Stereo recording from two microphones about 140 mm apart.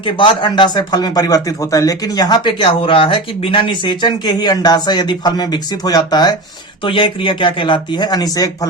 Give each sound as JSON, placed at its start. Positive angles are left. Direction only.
{"t": 0.0, "sound": "speech", "side_deg": 35}